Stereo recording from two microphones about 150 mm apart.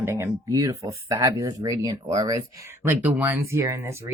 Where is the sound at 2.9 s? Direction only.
10° right (ahead or behind).